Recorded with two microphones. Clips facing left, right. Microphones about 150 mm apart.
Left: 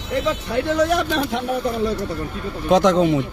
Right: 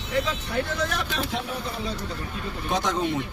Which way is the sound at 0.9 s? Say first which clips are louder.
Left 9 dB; 65° left (ahead or behind).